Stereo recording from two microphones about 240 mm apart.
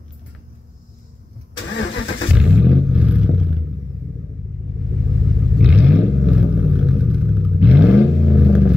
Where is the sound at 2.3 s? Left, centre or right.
Centre.